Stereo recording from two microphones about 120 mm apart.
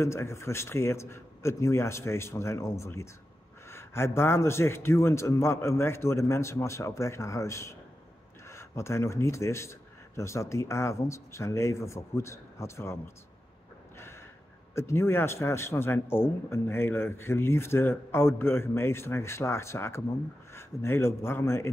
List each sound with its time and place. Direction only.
0.0 s speech: 20° left (ahead or behind)
13.9 s gasp: 20° left (ahead or behind)
14.8 s speech: 20° left (ahead or behind)